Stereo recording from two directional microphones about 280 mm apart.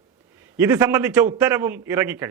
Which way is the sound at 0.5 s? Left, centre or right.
Centre.